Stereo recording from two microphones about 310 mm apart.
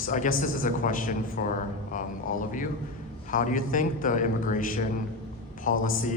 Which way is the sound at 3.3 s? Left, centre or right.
Left.